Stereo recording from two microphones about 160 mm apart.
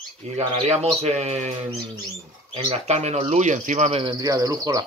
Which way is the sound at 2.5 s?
40° right (ahead or behind).